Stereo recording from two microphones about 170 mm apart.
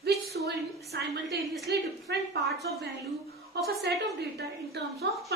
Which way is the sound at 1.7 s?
85° right.